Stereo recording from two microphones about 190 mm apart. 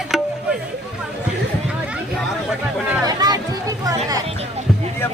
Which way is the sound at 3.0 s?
20° right (ahead or behind).